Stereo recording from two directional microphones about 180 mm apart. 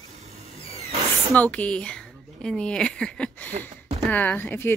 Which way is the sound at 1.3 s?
10° left (ahead or behind).